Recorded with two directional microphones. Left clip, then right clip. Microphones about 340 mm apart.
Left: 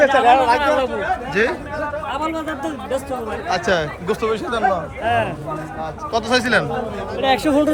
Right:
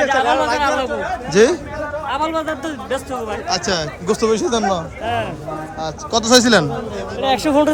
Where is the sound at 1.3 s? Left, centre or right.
Centre.